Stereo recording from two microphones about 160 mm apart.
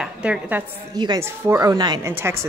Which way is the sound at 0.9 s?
25° right (ahead or behind).